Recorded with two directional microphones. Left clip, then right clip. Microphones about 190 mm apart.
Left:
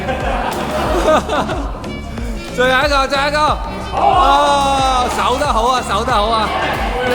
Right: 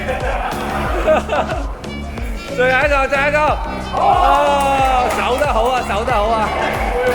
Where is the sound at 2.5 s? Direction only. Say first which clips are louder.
Left 1 dB; 15° left (ahead or behind).